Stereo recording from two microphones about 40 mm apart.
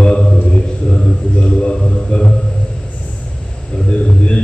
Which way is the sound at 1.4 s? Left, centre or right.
Left.